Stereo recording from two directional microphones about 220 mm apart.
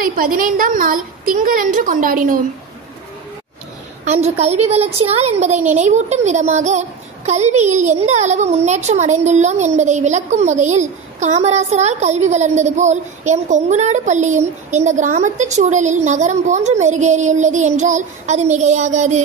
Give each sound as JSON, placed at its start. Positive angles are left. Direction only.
{"t": 0.0, "sound": "a woman's voice", "side_deg": -40}
{"t": 4.0, "sound": "a woman's voice", "side_deg": -30}